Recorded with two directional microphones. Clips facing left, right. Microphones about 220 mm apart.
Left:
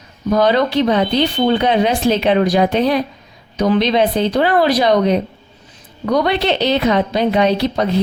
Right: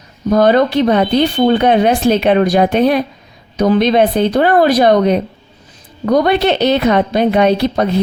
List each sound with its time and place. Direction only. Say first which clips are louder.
0.3 s a woman's voice: right 4 dB; 50° right (ahead or behind)